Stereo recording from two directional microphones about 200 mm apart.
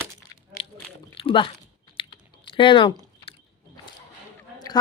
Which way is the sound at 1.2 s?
25° left (ahead or behind).